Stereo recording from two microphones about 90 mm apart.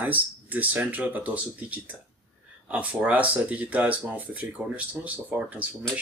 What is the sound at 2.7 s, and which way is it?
Speech, 15° right (ahead or behind).